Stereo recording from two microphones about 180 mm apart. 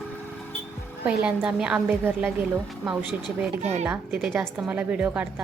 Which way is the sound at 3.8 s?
5° right (ahead or behind).